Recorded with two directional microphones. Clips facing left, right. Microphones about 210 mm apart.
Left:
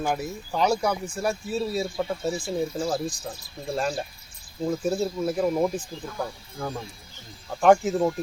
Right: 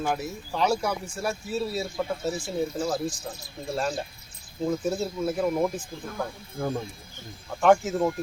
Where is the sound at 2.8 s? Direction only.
Centre (ahead or behind).